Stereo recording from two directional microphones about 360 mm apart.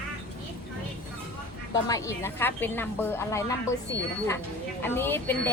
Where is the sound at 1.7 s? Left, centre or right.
Centre.